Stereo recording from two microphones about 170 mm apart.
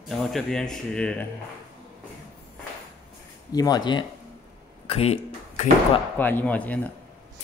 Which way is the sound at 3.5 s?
25° left (ahead or behind).